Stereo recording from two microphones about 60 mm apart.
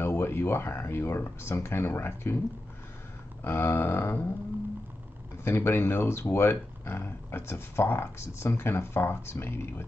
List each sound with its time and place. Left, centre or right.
0.0 s speech: left
3.4 s speech: left
5.4 s speech: left